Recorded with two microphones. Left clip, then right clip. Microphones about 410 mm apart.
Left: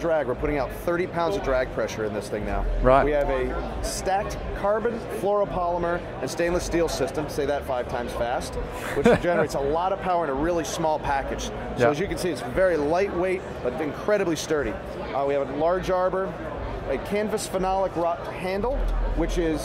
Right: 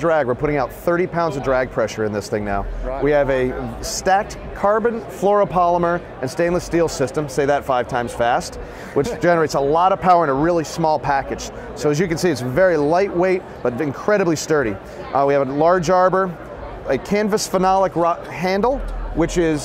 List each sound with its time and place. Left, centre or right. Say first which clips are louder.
0.0 s speech: right 7 dB; right